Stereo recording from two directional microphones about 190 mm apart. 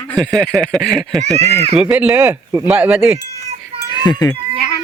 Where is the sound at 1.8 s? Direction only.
10° right (ahead or behind).